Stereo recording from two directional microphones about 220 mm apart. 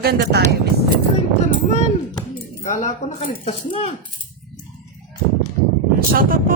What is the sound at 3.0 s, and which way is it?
Speech, 30° left (ahead or behind).